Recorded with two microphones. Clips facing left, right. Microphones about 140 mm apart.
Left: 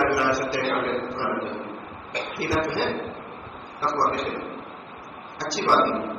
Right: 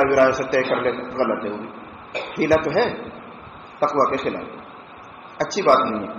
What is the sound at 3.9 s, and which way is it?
A man's voice, 50° right (ahead or behind).